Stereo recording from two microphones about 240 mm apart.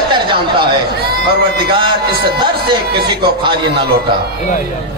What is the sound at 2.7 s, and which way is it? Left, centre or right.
Speech, centre.